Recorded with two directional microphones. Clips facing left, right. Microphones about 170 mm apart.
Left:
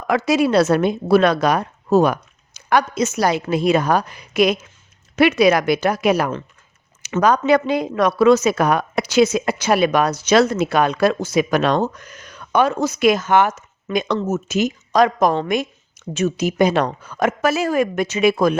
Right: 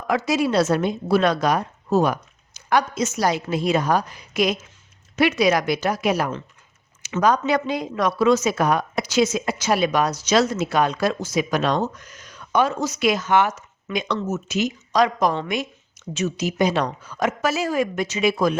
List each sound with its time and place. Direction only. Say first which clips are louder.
0.1 s speech: left 4 dB; 65° left (ahead or behind)